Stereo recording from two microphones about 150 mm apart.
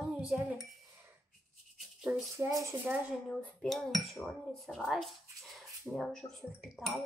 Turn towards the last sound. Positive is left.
turn(degrees=0)  # may be behind; listen again after turning